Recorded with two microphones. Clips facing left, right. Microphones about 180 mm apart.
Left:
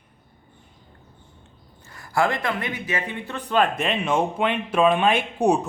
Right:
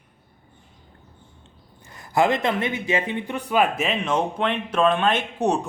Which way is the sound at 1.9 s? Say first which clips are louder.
Right 2 dB; 20° right (ahead or behind).